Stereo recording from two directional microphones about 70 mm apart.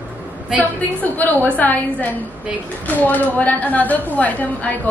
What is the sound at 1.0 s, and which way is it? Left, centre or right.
A woman's voice, left.